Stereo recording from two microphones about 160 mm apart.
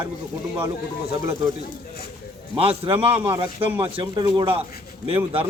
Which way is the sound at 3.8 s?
30° right (ahead or behind).